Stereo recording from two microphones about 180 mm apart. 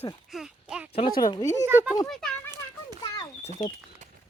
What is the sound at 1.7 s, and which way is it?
Child singing, 10° right (ahead or behind).